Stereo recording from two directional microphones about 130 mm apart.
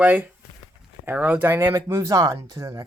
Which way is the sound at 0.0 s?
10° right (ahead or behind).